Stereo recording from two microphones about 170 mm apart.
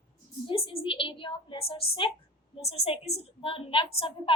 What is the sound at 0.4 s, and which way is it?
A woman's voice, 35° left (ahead or behind).